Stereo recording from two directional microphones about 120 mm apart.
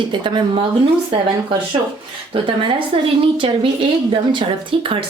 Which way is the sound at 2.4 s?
45° right (ahead or behind).